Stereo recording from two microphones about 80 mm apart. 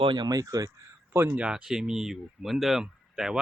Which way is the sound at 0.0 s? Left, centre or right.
Right.